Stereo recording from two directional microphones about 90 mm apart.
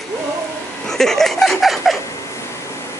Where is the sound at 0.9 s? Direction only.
5° left (ahead or behind).